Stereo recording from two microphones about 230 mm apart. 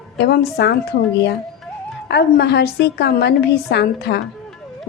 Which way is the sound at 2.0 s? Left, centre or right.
Left.